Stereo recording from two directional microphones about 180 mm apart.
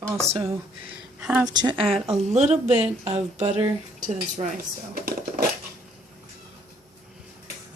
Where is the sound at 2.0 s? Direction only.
35° right (ahead or behind).